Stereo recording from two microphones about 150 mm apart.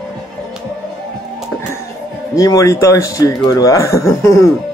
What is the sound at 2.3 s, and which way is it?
Speech, 20° left (ahead or behind).